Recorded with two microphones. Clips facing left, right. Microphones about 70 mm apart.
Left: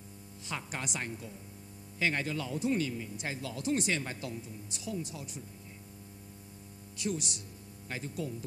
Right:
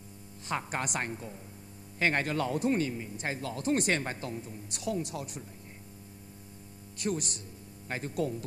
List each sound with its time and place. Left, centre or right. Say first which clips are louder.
0.5 s speech: right 6 dB; right
1.1 s speech: right 3 dB; right
2.0 s speech: right 4 dB; right
2.7 s speech: right 2 dB; right
4.6 s speech: right 6 dB; right
7.0 s speech: right 2 dB; right
8.1 s speech: right 8 dB; right